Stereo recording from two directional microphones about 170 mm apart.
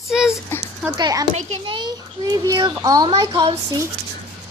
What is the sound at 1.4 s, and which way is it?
Speech, 40° right (ahead or behind).